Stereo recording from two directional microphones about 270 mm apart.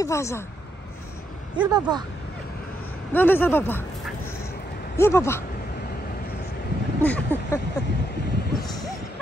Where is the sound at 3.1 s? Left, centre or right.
Centre.